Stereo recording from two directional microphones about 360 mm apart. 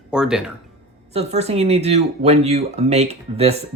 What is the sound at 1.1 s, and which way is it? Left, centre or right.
Speech, centre.